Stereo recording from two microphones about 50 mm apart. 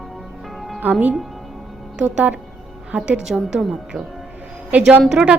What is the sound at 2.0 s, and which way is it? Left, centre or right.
Speech, right.